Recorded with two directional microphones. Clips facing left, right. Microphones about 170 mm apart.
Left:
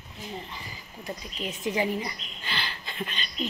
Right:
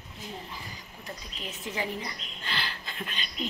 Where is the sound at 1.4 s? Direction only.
15° left (ahead or behind).